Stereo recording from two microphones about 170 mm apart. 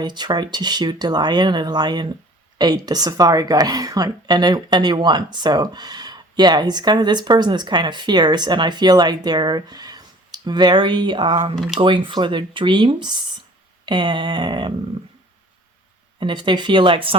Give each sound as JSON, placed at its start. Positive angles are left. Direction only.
{"t": 0.0, "sound": "speech", "side_deg": -25}
{"t": 11.5, "sound": "speech", "side_deg": 0}
{"t": 11.8, "sound": "speech", "side_deg": -30}
{"t": 16.2, "sound": "speech", "side_deg": -30}